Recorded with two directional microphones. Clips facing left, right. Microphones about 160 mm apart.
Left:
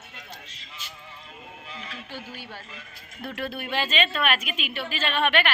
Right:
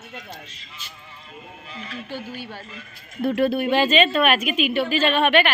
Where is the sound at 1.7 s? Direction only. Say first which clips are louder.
Right 7 dB; 15° left (ahead or behind).